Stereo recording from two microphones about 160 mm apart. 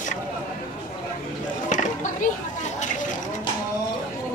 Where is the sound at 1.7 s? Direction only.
50° left (ahead or behind).